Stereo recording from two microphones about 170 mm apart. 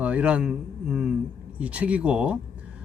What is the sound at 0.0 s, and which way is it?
A man's voice, 10° right (ahead or behind).